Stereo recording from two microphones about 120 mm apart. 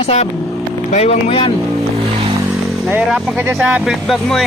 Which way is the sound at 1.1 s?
50° left (ahead or behind).